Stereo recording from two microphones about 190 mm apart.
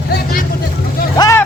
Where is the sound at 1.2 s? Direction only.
15° left (ahead or behind).